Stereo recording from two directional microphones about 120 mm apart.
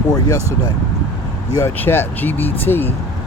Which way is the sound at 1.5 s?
20° left (ahead or behind).